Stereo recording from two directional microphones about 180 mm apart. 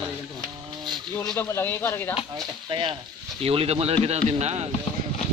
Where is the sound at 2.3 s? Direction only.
25° right (ahead or behind).